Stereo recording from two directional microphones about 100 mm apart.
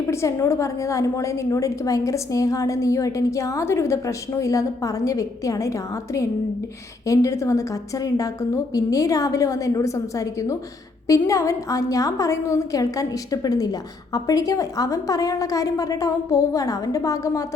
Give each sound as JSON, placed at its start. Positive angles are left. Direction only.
{"t": 0.1, "sound": "a woman's voice", "side_deg": 30}